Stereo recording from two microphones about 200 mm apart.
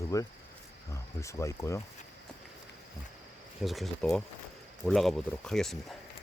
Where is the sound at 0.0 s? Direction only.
15° left (ahead or behind).